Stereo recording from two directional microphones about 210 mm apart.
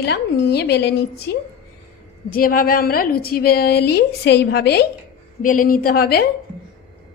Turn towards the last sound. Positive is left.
turn(degrees=45)  # may be behind; listen again after turning